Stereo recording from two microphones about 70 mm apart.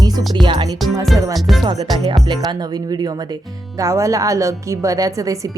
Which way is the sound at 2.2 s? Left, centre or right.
Right.